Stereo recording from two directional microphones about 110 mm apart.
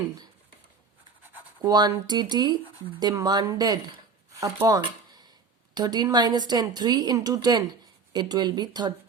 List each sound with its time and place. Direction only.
1.6 s a woman's voice: 35° right (ahead or behind)
4.8 s a sound: 40° right (ahead or behind)
5.7 s a woman's voice: 40° right (ahead or behind)